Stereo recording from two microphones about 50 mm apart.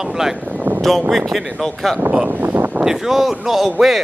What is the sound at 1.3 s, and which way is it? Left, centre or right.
Speech, centre.